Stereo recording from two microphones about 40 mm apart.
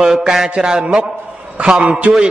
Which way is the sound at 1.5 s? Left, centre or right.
Right.